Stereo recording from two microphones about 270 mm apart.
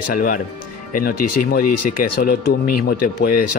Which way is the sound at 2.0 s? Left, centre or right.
Left.